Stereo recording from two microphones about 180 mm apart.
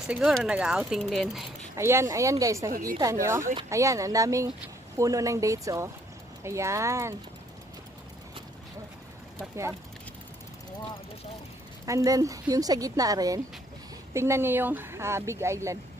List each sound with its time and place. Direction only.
0.0 s speech: 5° right (ahead or behind)
1.8 s speech: 15° right (ahead or behind)
9.4 s speech: 15° right (ahead or behind)
11.8 s speech: 20° right (ahead or behind)